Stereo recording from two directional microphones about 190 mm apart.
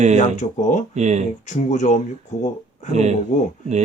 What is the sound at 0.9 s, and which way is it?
Speech, 40° right (ahead or behind).